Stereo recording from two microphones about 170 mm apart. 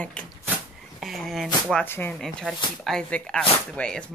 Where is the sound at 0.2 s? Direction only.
5° left (ahead or behind).